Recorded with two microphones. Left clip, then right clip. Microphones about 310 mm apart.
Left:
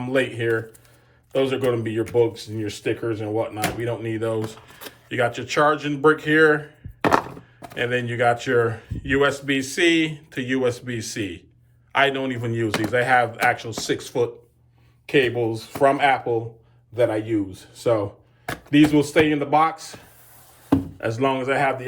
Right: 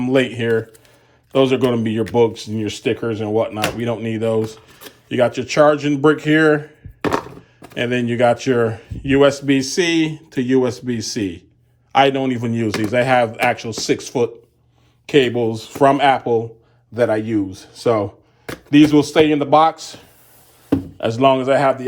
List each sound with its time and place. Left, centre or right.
0.0 s speech: centre
4.4 s speech: centre
5.0 s speech: centre
7.0 s chopping: centre
7.8 s speech: centre
21.3 s speech: centre